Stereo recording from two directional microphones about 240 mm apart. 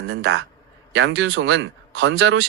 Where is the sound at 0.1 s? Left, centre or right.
Right.